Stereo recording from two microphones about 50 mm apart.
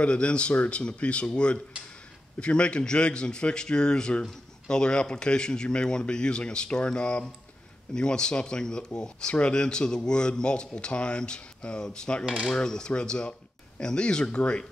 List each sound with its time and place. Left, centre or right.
0.0 s a man's voice: left